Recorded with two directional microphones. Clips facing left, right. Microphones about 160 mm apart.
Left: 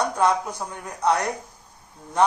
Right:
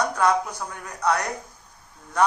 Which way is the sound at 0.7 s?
25° left (ahead or behind).